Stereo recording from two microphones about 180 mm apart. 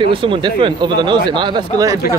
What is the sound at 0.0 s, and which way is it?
Speech, 30° right (ahead or behind).